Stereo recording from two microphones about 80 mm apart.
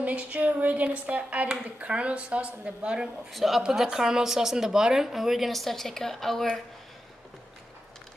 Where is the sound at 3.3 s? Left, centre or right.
Centre.